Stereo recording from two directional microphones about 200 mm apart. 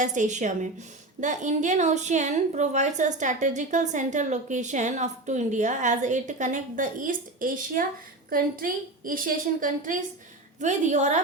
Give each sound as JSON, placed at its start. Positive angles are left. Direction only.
{"t": 0.0, "sound": "a woman's voice", "side_deg": -40}